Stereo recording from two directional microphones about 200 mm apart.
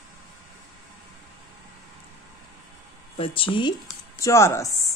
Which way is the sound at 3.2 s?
25° left (ahead or behind).